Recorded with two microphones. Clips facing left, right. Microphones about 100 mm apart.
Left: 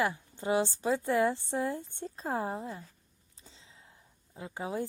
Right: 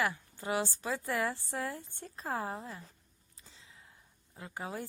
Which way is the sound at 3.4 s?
30° left (ahead or behind).